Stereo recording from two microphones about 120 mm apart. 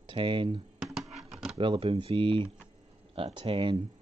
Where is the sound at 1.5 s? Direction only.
50° right (ahead or behind).